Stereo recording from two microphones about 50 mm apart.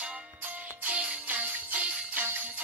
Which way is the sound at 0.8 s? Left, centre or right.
Right.